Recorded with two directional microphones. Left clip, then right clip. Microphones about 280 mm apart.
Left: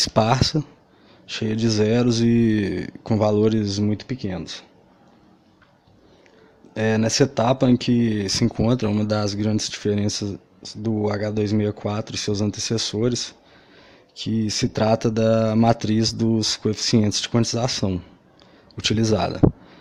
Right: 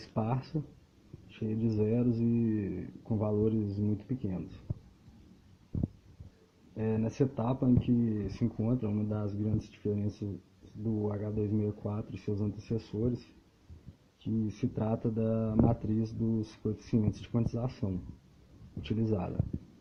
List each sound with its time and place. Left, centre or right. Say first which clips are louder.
0.1 s speech: left 12 dB; left
0.5 s speech: left 13 dB; left
1.3 s speech: left 12 dB; left
6.7 s speech: left 13 dB; left
14.4 s speech: left 17 dB; left